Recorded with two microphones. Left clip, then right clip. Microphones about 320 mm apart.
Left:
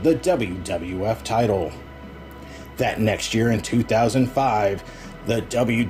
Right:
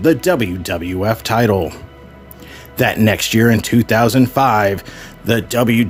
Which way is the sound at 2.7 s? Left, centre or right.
Right.